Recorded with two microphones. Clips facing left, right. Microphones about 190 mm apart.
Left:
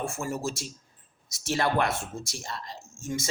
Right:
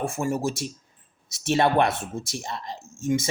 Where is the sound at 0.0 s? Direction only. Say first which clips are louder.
Right 5 dB; 15° right (ahead or behind).